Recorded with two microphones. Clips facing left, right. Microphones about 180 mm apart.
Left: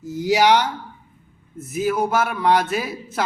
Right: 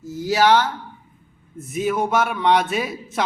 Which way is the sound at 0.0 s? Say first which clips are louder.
Left 1 dB; 15° left (ahead or behind).